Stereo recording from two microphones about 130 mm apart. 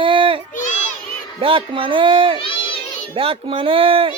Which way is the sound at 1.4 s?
45° right (ahead or behind).